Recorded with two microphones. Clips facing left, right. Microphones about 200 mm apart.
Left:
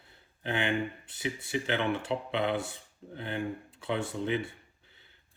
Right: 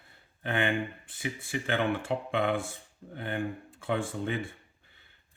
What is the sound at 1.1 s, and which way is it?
Speech, 50° right (ahead or behind).